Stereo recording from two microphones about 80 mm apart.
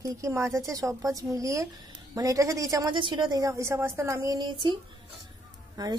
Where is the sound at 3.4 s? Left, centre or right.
Right.